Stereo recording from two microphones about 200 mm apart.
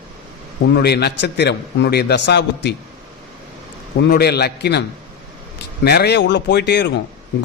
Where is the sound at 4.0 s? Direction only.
55° left (ahead or behind).